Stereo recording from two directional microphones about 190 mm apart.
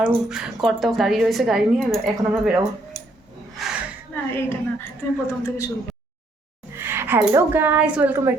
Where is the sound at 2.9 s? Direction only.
20° left (ahead or behind).